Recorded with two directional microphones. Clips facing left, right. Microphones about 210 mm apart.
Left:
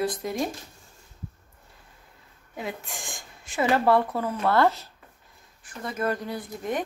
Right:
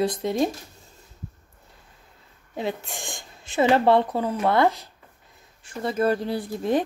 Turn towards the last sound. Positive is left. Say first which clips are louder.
# right 6 dB
turn(degrees=-30)  # may be behind; listen again after turning